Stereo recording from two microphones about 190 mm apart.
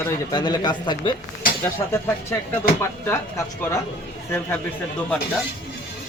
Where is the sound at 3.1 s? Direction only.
15° left (ahead or behind).